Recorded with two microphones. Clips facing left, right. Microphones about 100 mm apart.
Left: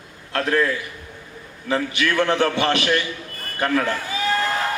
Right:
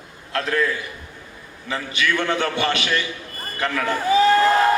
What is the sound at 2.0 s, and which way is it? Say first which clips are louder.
A man's voice: left 1 dB; 30° left (ahead or behind).